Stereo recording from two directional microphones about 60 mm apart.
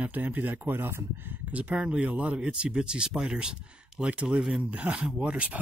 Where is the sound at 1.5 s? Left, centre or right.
Right.